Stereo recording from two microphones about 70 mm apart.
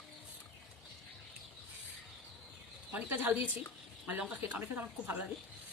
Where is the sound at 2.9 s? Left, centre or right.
Right.